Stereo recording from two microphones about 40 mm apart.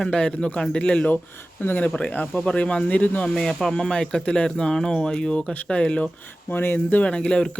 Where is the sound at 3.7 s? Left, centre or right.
Left.